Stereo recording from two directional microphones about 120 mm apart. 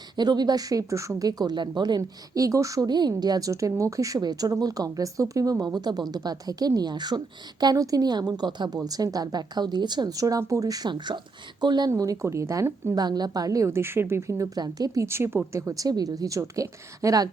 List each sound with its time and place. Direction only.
0.2 s speech: 35° right (ahead or behind)
11.9 s a woman's voice: 25° right (ahead or behind)
13.0 s a woman's voice: 35° right (ahead or behind)